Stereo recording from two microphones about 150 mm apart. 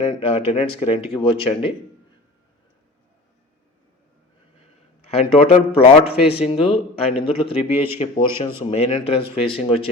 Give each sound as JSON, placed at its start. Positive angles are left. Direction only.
{"t": 0.0, "sound": "speech", "side_deg": 40}
{"t": 5.1, "sound": "speech", "side_deg": 40}